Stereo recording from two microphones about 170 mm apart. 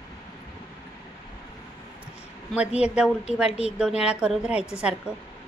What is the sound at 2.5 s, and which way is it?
A woman's voice, 5° right (ahead or behind).